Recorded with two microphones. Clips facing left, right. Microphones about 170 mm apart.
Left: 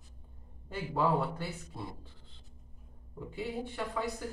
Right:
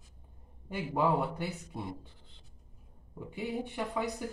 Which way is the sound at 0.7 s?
15° right (ahead or behind).